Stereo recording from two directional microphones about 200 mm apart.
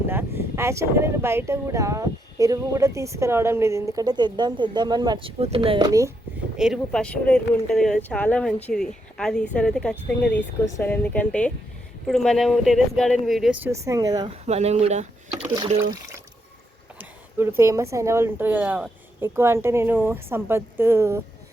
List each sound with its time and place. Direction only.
0.1 s speech: 10° right (ahead or behind)
6.6 s a woman's voice: centre (ahead or behind); by 14.3 s 20° right (ahead or behind)
14.4 s speech: 35° right (ahead or behind)
15.4 s speech: 20° right (ahead or behind)
17.0 s a sound: 10° right (ahead or behind)
17.6 s speech: 15° right (ahead or behind)